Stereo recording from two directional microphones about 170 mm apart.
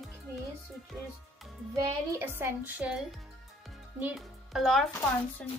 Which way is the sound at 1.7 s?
20° right (ahead or behind).